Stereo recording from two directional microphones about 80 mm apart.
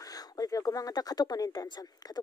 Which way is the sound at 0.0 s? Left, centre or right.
Left.